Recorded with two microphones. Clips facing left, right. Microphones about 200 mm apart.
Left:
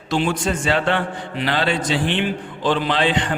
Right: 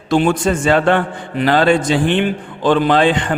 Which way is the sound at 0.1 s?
50° right (ahead or behind).